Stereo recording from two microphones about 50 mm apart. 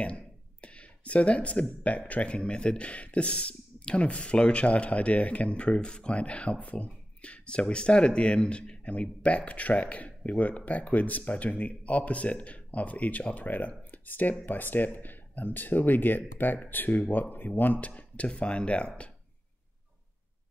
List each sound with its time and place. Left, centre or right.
0.0 s speech: left